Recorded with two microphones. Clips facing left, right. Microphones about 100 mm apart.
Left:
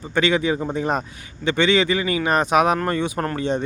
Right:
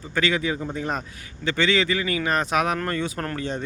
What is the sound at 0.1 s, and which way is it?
Speech, 25° left (ahead or behind).